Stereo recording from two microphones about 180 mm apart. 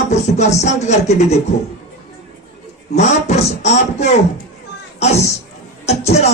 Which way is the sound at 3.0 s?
40° left (ahead or behind).